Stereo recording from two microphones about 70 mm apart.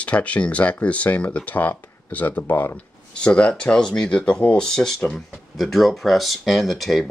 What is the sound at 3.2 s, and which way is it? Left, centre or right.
Speech, centre.